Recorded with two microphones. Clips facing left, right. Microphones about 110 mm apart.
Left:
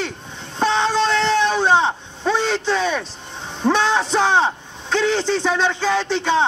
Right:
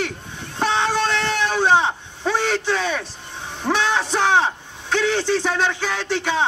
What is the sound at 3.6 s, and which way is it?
A man's voice, 20° left (ahead or behind).